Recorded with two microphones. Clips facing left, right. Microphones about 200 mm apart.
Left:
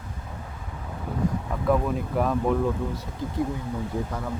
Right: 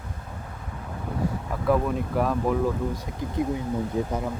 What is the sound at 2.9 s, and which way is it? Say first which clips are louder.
Speech: right 1 dB; 15° right (ahead or behind).